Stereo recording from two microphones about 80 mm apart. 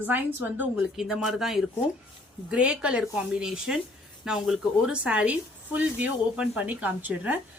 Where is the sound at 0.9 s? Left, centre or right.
Centre.